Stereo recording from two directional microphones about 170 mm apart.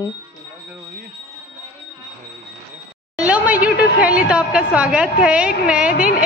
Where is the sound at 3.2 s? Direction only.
10° right (ahead or behind).